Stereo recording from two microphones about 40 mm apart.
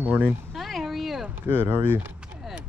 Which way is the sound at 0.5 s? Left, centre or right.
Centre.